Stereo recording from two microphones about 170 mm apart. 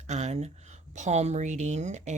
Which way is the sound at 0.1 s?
40° right (ahead or behind).